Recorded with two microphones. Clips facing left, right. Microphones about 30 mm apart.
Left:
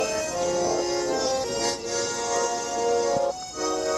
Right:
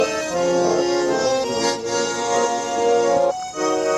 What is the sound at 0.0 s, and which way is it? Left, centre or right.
Accordion, right.